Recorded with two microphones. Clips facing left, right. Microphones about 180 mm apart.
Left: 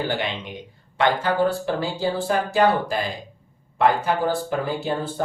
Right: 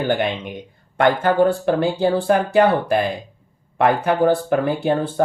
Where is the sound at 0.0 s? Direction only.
55° right (ahead or behind).